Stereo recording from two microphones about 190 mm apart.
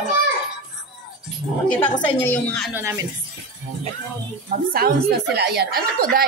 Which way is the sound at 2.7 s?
15° right (ahead or behind).